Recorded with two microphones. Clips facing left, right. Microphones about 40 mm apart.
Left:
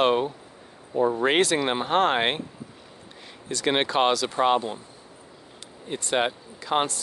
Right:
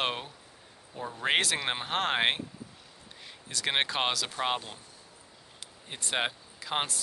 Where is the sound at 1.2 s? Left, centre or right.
Centre.